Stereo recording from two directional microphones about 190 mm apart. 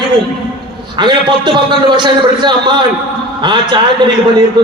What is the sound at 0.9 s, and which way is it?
A man's voice, 25° right (ahead or behind).